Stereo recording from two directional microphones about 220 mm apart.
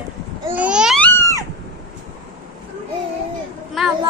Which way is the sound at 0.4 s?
5° right (ahead or behind).